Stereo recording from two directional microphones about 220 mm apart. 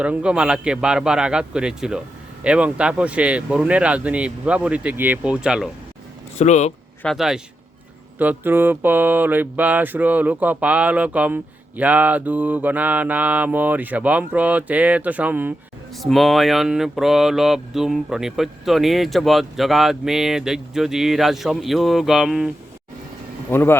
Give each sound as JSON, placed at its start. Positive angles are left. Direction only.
{"t": 0.0, "sound": "speech", "side_deg": -5}
{"t": 6.4, "sound": "speech", "side_deg": 30}
{"t": 7.0, "sound": "speech", "side_deg": 0}
{"t": 8.2, "sound": "mantra", "side_deg": -10}
{"t": 16.0, "sound": "speech", "side_deg": 0}
{"t": 23.5, "sound": "speech", "side_deg": 10}